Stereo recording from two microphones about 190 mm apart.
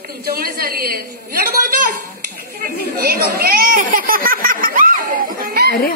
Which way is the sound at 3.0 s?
50° right (ahead or behind).